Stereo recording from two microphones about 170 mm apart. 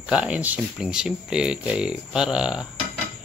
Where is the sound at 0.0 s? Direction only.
5° right (ahead or behind).